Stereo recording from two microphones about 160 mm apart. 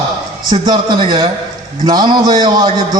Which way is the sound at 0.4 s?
25° right (ahead or behind).